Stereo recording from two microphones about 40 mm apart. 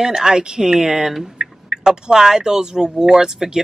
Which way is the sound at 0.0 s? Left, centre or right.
Centre.